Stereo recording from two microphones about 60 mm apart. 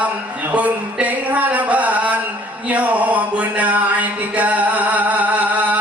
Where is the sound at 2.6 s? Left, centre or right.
Right.